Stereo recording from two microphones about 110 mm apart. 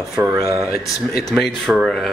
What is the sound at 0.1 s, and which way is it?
Speech, 25° right (ahead or behind).